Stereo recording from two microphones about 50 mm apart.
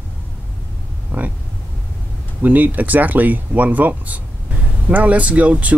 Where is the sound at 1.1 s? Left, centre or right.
Right.